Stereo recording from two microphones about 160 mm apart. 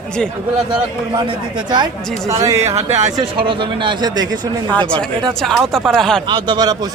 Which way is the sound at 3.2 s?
30° right (ahead or behind).